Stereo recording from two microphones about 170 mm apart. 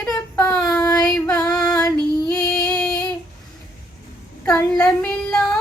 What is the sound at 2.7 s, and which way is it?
Child singing, 5° left (ahead or behind).